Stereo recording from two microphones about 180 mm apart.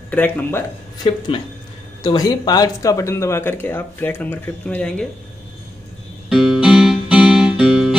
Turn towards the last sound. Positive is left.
turn(degrees=-5)  # may be behind; listen again after turning